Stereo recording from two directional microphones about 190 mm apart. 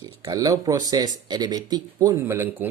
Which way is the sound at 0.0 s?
20° right (ahead or behind).